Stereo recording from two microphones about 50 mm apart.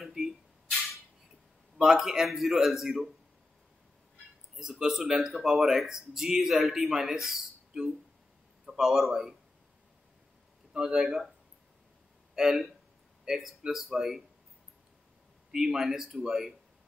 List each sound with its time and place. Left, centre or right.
0.0 s a sound: centre
1.8 s speech: centre
4.6 s speech: centre
10.7 s speech: centre
12.4 s speech: centre
15.5 s speech: centre